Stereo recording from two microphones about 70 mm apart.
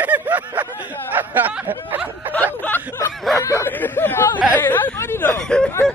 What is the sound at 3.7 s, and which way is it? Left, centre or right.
Speech, left.